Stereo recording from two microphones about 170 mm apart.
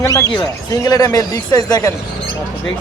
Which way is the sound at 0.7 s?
20° left (ahead or behind).